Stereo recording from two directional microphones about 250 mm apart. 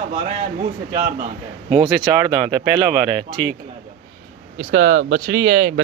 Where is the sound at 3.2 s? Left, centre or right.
Right.